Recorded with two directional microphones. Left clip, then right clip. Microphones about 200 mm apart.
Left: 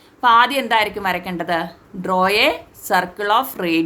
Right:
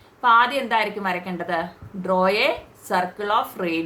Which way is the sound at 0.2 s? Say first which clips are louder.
Left 3 dB; 55° left (ahead or behind).